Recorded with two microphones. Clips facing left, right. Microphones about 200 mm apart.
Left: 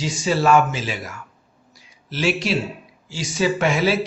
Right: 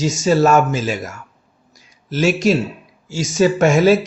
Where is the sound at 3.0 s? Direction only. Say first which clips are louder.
Right 6 dB; 45° right (ahead or behind).